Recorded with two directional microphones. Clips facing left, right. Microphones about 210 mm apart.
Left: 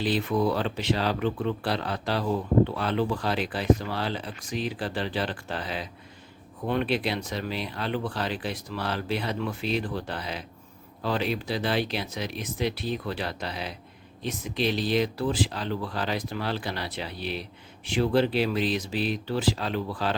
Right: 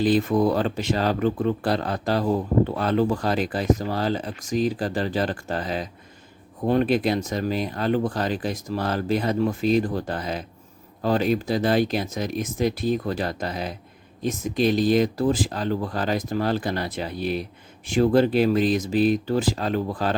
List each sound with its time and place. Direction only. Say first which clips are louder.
0.0 s speech: right 5 dB; 45° right (ahead or behind)